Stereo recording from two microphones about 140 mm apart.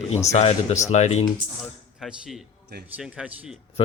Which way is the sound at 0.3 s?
50° left (ahead or behind).